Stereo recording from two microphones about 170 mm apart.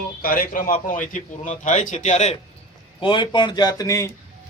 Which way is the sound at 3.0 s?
30° left (ahead or behind).